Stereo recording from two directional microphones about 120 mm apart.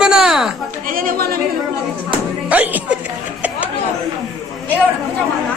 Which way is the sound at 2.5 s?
15° right (ahead or behind).